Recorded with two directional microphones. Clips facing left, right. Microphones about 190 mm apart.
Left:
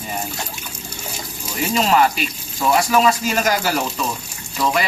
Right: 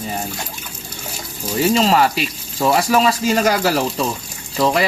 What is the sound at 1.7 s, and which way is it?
Speech, 30° right (ahead or behind).